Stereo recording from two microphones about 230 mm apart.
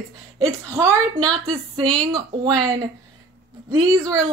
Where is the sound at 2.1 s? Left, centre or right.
Centre.